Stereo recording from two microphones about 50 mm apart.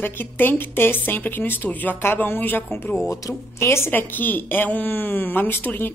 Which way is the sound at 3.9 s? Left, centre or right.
Left.